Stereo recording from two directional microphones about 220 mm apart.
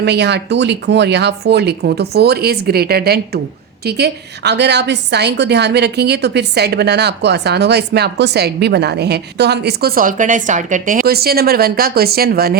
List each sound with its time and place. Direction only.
0.0 s a woman's voice: 50° right (ahead or behind)